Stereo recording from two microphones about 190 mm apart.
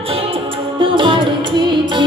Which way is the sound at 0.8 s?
25° right (ahead or behind).